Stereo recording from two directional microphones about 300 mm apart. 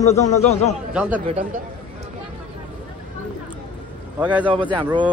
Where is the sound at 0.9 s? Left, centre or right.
Centre.